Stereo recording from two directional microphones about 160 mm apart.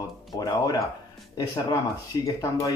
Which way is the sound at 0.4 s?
20° left (ahead or behind).